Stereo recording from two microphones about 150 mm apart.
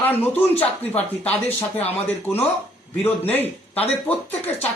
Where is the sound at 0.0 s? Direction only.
15° left (ahead or behind).